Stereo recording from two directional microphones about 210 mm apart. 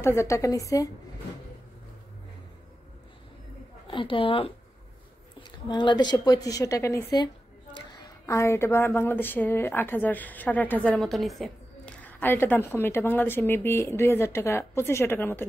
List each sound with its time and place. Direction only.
0.0 s a woman's voice: 15° left (ahead or behind)
3.8 s a woman's voice: 25° left (ahead or behind)